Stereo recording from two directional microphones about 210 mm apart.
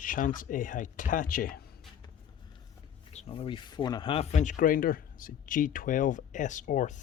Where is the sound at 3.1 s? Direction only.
25° left (ahead or behind).